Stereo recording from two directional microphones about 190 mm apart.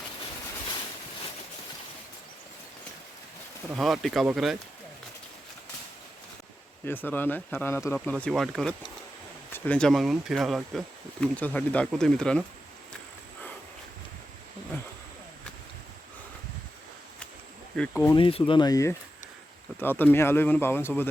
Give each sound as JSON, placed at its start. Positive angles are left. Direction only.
{"t": 3.7, "sound": "speech", "side_deg": 0}
{"t": 6.8, "sound": "speech", "side_deg": 10}
{"t": 17.7, "sound": "speech", "side_deg": 10}
{"t": 18.2, "sound": "speech", "side_deg": 30}